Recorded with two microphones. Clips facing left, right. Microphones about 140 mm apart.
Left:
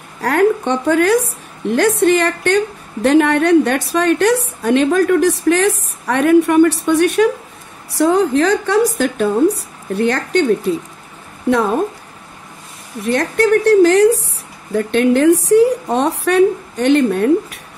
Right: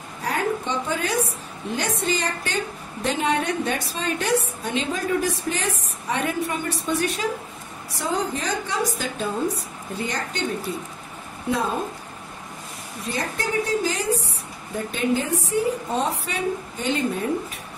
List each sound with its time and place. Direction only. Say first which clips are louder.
0.2 s a woman's voice: left 11 dB; 70° left (ahead or behind)
9.9 s a woman's voice: left 13 dB; 80° left
13.0 s a woman's voice: left 13 dB; 75° left (ahead or behind)